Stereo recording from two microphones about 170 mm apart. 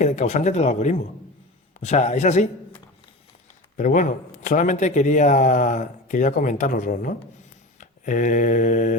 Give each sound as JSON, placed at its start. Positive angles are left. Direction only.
{"t": 0.0, "sound": "a man's voice", "side_deg": 45}
{"t": 3.8, "sound": "a man's voice", "side_deg": 50}